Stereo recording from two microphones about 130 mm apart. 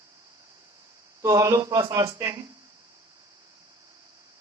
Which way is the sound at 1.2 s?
25° right (ahead or behind).